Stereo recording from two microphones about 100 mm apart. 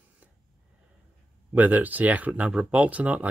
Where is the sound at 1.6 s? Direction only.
15° right (ahead or behind).